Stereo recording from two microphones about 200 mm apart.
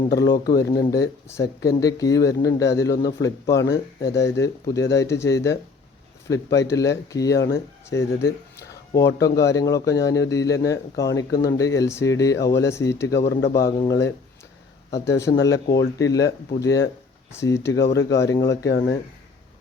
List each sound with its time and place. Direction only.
0.7 s speech: 15° left (ahead or behind)